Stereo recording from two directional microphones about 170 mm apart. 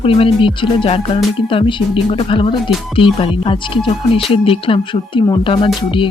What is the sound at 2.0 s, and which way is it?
Speech, 35° left (ahead or behind).